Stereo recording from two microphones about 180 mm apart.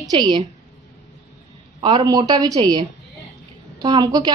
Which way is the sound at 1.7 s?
25° right (ahead or behind).